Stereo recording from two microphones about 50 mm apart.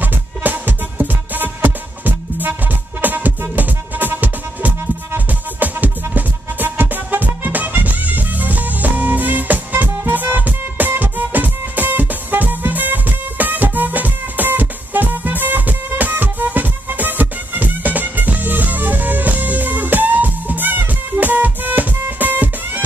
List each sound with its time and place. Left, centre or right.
0.0 s music: right